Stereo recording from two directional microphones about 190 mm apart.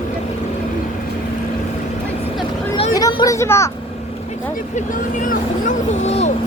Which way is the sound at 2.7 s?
25° left (ahead or behind).